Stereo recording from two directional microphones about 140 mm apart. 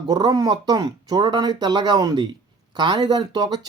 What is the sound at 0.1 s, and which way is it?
Speech, 30° right (ahead or behind).